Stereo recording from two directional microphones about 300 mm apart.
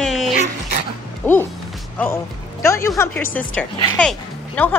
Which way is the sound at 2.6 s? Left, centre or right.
Centre.